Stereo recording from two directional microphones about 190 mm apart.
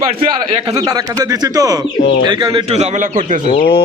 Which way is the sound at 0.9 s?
20° right (ahead or behind).